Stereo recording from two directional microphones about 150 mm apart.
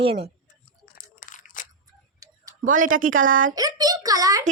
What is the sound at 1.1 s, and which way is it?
Crushing, 60° left (ahead or behind).